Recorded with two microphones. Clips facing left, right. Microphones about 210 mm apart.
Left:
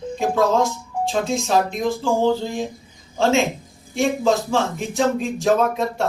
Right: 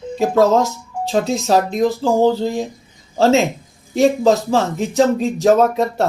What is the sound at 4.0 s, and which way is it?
Speech, 35° right (ahead or behind).